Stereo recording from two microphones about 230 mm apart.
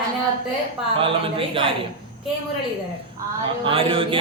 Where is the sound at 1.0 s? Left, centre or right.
Right.